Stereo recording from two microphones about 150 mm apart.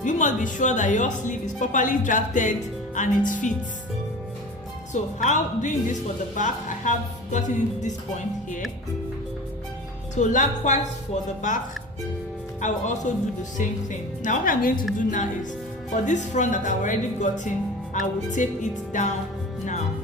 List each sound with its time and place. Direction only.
0.0 s speech: 55° left (ahead or behind)
5.2 s a woman's voice: 55° left (ahead or behind)
10.2 s a woman's voice: 55° left (ahead or behind)
14.2 s speech: 60° left (ahead or behind)